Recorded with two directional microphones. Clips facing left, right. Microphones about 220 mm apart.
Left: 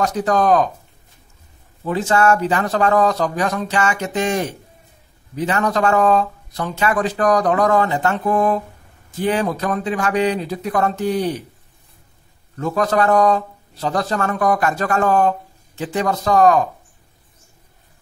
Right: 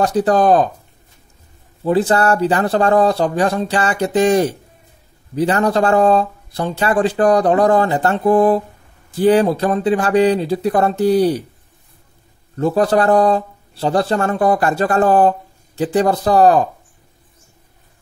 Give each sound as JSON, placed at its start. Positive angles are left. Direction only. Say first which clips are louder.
{"t": 0.0, "sound": "a man's voice", "louder": "right 4 dB", "side_deg": -30}
{"t": 1.9, "sound": "a man's voice", "louder": "right 2 dB", "side_deg": -35}
{"t": 12.5, "sound": "a man's voice", "louder": "right 4 dB", "side_deg": -30}